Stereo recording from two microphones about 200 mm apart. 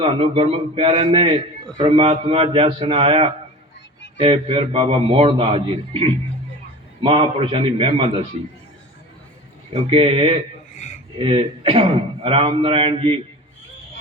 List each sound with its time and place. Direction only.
0.0 s speech: 30° right (ahead or behind)
9.7 s speech: 25° right (ahead or behind)